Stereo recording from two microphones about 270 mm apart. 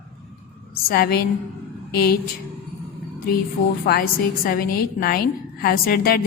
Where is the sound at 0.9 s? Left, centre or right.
Left.